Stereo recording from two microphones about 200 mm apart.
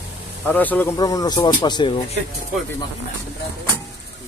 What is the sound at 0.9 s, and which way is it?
Speech, 20° left (ahead or behind).